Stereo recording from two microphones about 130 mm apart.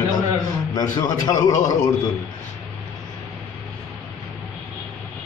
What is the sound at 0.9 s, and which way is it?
Speech, 30° left (ahead or behind).